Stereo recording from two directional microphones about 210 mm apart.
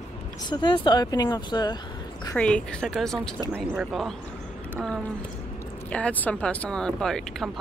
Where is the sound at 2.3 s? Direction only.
5° left (ahead or behind).